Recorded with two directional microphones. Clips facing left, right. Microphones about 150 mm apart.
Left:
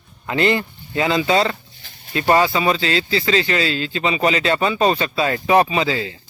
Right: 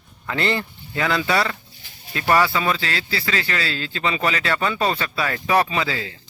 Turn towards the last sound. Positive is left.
turn(degrees=20)  # may be behind; listen again after turning